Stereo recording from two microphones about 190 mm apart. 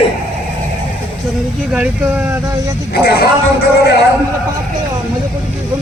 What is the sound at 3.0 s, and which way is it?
Speech, 55° left (ahead or behind).